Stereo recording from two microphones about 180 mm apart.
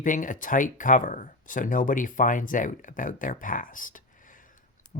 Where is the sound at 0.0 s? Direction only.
45° left (ahead or behind).